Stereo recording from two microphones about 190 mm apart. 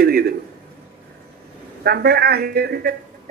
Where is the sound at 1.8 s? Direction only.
55° right (ahead or behind).